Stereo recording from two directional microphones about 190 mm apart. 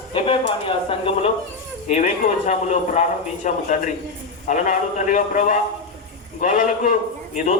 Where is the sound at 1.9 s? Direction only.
40° left (ahead or behind).